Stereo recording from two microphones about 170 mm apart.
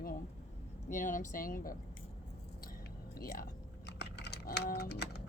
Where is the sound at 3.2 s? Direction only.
60° left (ahead or behind).